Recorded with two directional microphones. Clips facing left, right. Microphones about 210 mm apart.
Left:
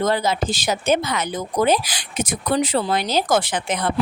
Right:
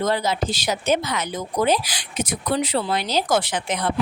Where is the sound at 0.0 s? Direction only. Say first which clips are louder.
Left 2 dB; 50° left (ahead or behind).